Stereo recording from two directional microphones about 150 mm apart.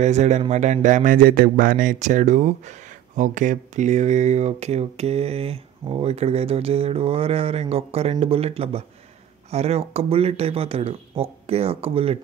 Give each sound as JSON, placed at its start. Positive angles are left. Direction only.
{"t": 0.0, "sound": "speech", "side_deg": -50}